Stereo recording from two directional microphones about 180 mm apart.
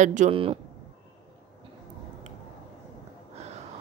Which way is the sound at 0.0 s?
45° right (ahead or behind).